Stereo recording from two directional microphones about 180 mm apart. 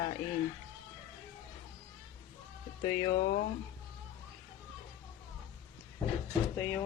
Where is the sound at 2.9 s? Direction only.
35° left (ahead or behind).